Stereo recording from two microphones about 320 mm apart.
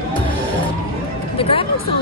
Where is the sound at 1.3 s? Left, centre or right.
Centre.